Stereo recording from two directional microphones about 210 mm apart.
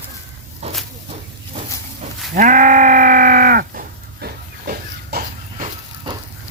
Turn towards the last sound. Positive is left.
turn(degrees=-45)  # may be behind; listen again after turning